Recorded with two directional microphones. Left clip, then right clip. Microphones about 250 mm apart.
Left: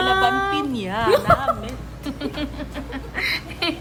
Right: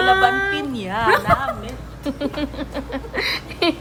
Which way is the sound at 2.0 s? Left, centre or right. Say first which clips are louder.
Right 4 dB; centre.